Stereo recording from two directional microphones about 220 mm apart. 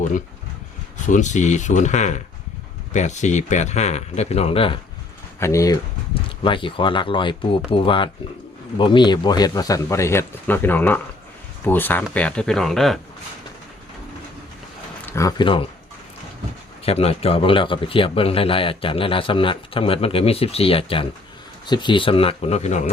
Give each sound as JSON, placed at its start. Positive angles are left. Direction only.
{"t": 1.0, "sound": "speech", "side_deg": 35}
{"t": 5.4, "sound": "a man's voice", "side_deg": 15}
{"t": 15.0, "sound": "speech", "side_deg": 15}
{"t": 16.8, "sound": "a man's voice", "side_deg": 25}